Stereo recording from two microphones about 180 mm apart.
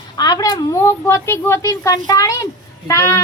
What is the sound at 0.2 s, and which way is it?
A woman's voice, 20° left (ahead or behind).